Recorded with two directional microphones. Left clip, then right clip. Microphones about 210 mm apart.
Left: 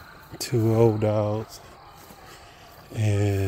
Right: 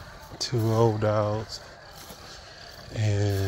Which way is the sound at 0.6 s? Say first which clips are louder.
Left 3 dB; 45° left (ahead or behind).